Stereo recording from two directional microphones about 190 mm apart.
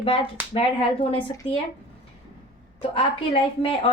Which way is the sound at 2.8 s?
30° left (ahead or behind).